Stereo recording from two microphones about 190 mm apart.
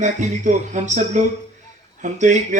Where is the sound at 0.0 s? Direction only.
40° right (ahead or behind).